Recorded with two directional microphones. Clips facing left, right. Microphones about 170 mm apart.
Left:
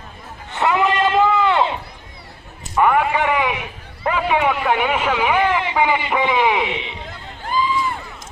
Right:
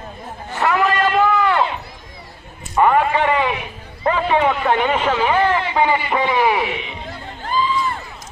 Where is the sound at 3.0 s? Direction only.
15° left (ahead or behind).